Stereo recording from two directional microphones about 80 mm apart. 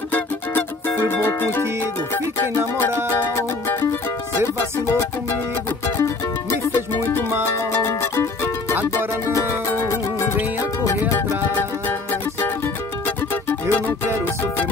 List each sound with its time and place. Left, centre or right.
0.1 s music: left
6.7 s music: left
9.8 s music: left
11.1 s music: left
13.0 s music: left